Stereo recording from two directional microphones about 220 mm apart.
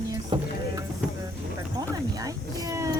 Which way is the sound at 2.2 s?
15° right (ahead or behind).